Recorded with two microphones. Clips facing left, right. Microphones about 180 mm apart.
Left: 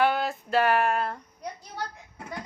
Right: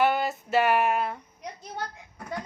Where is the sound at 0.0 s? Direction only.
5° right (ahead or behind).